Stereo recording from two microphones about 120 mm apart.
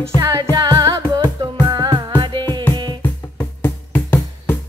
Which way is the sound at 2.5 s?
20° left (ahead or behind).